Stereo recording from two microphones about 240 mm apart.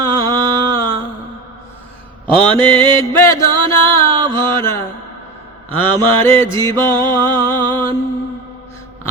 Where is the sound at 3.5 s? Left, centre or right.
Right.